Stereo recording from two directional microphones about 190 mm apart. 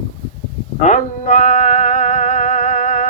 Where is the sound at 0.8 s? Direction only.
40° left (ahead or behind).